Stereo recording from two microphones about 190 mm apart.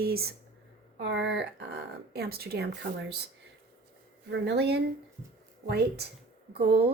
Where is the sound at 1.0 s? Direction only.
70° right (ahead or behind).